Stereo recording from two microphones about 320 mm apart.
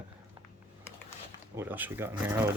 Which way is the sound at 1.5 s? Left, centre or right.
Centre.